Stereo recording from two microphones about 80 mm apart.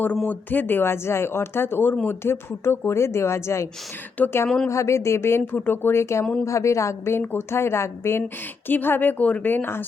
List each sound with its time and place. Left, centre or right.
0.3 s a woman's voice: left
4.4 s speech: centre
4.7 s a woman's voice: left